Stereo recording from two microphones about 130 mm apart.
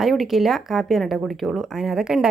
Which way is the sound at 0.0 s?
Centre (ahead or behind).